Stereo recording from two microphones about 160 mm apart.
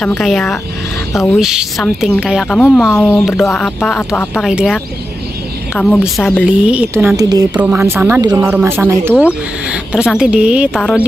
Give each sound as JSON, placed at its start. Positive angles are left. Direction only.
{"t": 0.2, "sound": "a woman's voice", "side_deg": 0}
{"t": 1.4, "sound": "a woman's voice", "side_deg": -5}
{"t": 3.0, "sound": "a woman's voice", "side_deg": 15}
{"t": 5.8, "sound": "a woman's voice", "side_deg": 0}
{"t": 7.2, "sound": "speech", "side_deg": -25}
{"t": 7.5, "sound": "speech", "side_deg": -10}
{"t": 8.2, "sound": "speech", "side_deg": -25}
{"t": 8.5, "sound": "speech", "side_deg": -10}
{"t": 10.7, "sound": "a woman's voice", "side_deg": 5}